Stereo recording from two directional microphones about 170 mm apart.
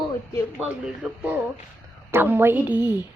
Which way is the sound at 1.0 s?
5° right (ahead or behind).